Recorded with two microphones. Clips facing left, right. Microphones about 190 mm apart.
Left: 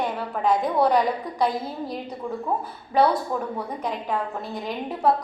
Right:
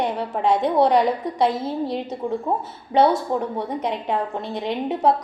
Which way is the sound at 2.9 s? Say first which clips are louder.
Right 3 dB; 25° right (ahead or behind).